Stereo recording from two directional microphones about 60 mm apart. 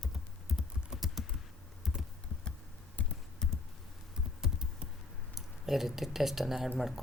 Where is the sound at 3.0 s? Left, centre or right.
Left.